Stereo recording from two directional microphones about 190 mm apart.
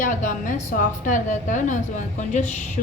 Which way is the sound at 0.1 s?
40° left (ahead or behind).